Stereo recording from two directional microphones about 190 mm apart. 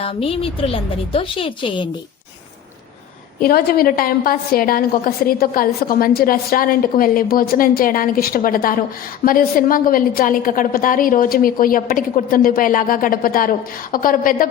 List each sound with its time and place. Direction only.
0.0 s a woman's voice: 30° left (ahead or behind)
3.4 s a woman's voice: 50° left (ahead or behind)